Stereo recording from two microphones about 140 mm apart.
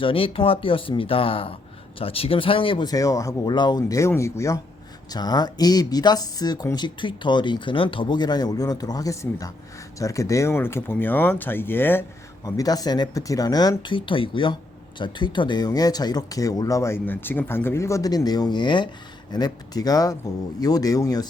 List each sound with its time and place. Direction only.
0.0 s speech: 40° left (ahead or behind); by 12.0 s 15° left (ahead or behind)
12.5 s speech: 25° left (ahead or behind)